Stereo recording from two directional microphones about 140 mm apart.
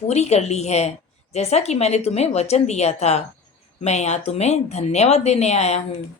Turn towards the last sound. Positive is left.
turn(degrees=50)  # may be behind; listen again after turning